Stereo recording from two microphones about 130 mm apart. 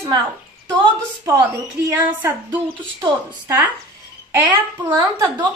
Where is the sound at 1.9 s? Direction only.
15° right (ahead or behind).